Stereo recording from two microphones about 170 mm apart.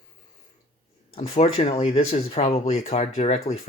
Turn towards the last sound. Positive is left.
turn(degrees=40)  # may be behind; listen again after turning